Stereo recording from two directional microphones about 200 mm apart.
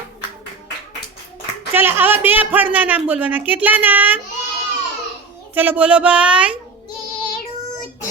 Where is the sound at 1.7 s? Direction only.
10° right (ahead or behind).